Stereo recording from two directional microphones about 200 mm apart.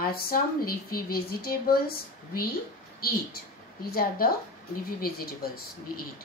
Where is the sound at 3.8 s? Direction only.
50° left (ahead or behind).